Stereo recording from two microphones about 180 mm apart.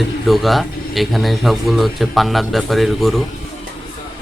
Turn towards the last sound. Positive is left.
turn(degrees=0)  # may be behind; listen again after turning